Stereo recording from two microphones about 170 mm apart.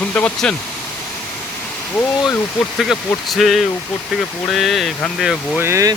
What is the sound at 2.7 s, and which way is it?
Speech, centre (ahead or behind).